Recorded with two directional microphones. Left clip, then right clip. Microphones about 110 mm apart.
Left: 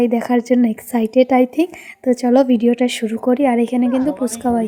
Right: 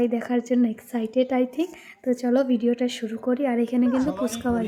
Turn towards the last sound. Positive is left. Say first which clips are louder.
# left 7 dB
turn(degrees=40)  # may be behind; listen again after turning